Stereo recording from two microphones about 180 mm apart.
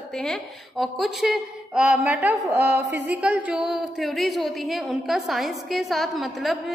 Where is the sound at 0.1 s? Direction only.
5° left (ahead or behind); by 2.8 s 15° right (ahead or behind).